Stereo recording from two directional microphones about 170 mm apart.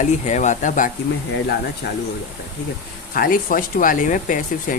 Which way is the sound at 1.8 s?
90° left.